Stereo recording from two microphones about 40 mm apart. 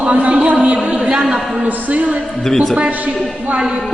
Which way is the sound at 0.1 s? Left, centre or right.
Right.